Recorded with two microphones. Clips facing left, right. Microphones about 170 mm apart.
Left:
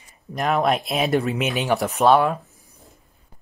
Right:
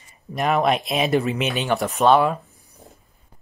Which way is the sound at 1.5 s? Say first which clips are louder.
Left 1 dB; 15° left (ahead or behind).